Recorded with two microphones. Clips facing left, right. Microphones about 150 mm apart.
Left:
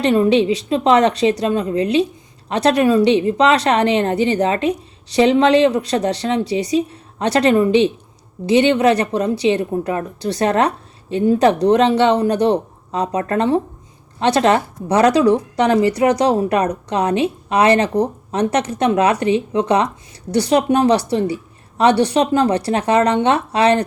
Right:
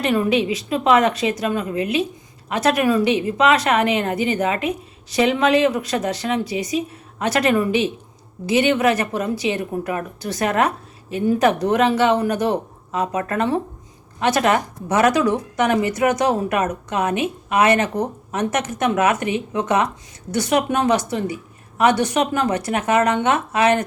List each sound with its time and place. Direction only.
0.0 s a woman's voice: 30° left (ahead or behind)